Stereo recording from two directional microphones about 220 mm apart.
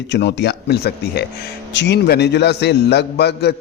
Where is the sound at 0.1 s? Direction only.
50° left (ahead or behind).